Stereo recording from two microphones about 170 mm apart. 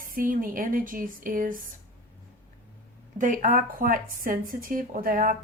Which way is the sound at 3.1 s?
50° right (ahead or behind).